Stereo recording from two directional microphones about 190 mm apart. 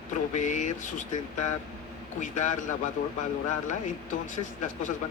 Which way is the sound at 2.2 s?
40° left (ahead or behind).